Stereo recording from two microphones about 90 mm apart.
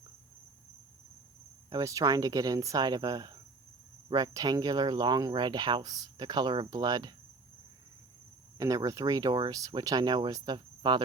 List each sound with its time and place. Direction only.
1.7 s speech: 40° right (ahead or behind); by 6.7 s 60° right (ahead or behind)
6.7 s speech: 50° right (ahead or behind)
8.5 s speech: 40° right (ahead or behind); by 11.0 s 55° right (ahead or behind)